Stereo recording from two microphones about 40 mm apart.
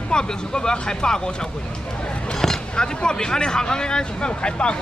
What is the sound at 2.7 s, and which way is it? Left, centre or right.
Speech, left.